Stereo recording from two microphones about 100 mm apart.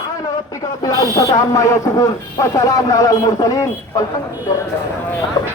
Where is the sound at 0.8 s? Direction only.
35° left (ahead or behind).